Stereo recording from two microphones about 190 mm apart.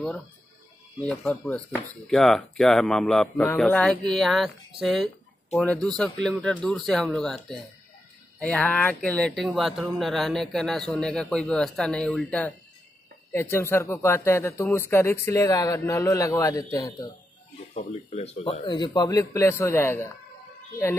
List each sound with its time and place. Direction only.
0.9 s a man's voice: 5° left (ahead or behind)
17.7 s a man's voice: 35° left (ahead or behind); by 20.1 s 15° left (ahead or behind)